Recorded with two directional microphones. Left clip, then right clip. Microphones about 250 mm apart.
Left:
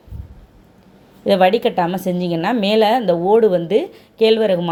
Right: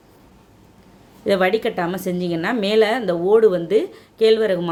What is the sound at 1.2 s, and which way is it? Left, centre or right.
A woman's voice, centre.